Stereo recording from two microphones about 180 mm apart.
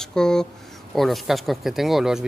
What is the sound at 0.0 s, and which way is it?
Speech, 5° left (ahead or behind).